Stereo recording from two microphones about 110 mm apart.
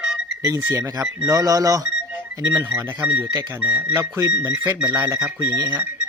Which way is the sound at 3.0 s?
15° right (ahead or behind).